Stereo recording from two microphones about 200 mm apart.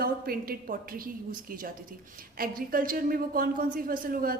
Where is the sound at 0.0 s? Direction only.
50° right (ahead or behind).